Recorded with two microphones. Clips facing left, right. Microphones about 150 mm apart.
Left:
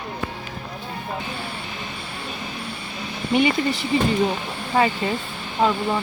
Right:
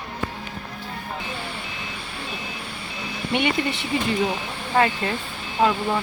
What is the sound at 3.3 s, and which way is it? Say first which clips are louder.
Speech: left 4 dB; centre (ahead or behind).